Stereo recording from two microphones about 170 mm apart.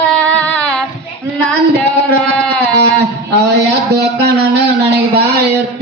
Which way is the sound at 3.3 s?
80° right.